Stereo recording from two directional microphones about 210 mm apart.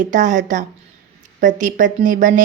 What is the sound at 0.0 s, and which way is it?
A woman's voice, 35° right (ahead or behind).